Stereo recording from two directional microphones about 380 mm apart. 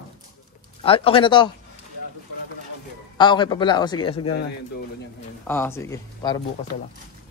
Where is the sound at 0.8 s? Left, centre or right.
Centre.